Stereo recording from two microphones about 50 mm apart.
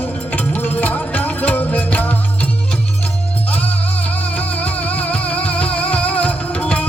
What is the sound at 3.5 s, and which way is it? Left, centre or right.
Music, left.